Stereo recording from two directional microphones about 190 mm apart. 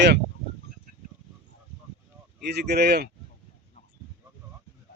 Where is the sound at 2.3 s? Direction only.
60° right (ahead or behind).